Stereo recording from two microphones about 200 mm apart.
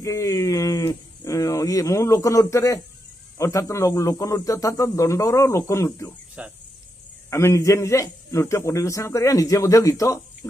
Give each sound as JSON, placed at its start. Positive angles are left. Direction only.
{"t": 0.0, "sound": "a man's voice", "side_deg": 15}
{"t": 6.4, "sound": "speech", "side_deg": -5}
{"t": 7.2, "sound": "a man's voice", "side_deg": 15}